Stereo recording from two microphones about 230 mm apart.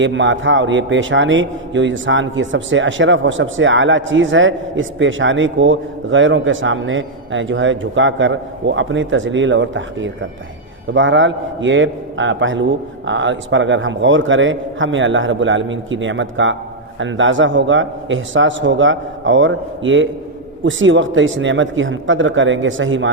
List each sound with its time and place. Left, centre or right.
0.0 s a man's voice: right